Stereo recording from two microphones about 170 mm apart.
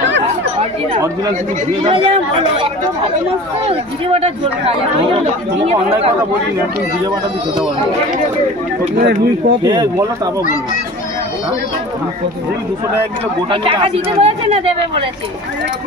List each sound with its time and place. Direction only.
0.0 s chatter: 90° right
1.9 s speech: 30° right (ahead or behind)
8.9 s speech: 90° right
9.6 s speech: 20° right (ahead or behind)
13.5 s speech: 30° right (ahead or behind)